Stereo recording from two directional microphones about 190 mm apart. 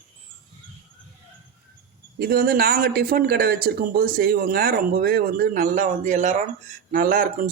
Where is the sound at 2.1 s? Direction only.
50° right (ahead or behind).